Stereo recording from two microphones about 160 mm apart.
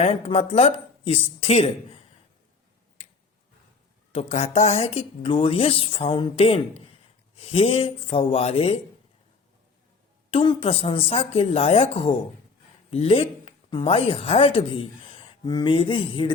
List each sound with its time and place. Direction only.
0.0 s speech: 40° left (ahead or behind)
4.1 s speech: 45° left (ahead or behind)
10.3 s a woman's voice: 30° left (ahead or behind)